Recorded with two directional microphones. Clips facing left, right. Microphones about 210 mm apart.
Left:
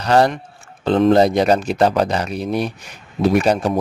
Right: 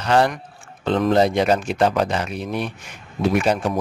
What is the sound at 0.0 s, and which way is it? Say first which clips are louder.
Speech: left 3 dB; 40° left (ahead or behind).